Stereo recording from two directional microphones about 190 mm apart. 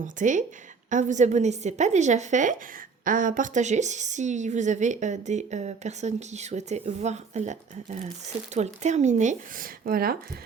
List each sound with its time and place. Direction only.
0.0 s a woman's voice: 40° right (ahead or behind)